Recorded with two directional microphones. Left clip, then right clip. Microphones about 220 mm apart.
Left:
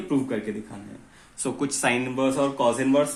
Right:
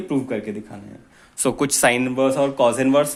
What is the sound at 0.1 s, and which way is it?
Speech, 35° right (ahead or behind).